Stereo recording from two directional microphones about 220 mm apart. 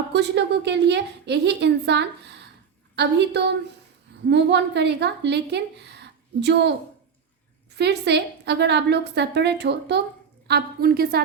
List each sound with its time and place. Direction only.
0.1 s a woman's voice: 50° right (ahead or behind)
7.8 s a woman's voice: 50° right (ahead or behind)